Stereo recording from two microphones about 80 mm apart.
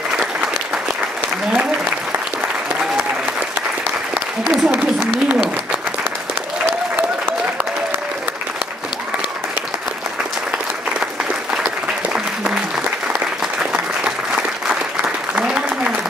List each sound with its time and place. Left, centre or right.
1.5 s applause: centre
4.1 s applause: centre
11.5 s applause: centre
13.6 s applause: centre